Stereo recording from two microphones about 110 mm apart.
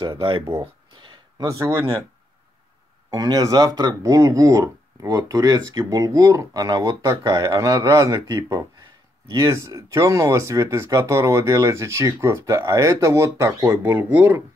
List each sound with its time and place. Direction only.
0.0 s speech: 50° right (ahead or behind)
0.6 s a sound: 45° right (ahead or behind)
1.5 s speech: 25° right (ahead or behind)
3.1 s speech: 35° right (ahead or behind); by 14.0 s 20° right (ahead or behind)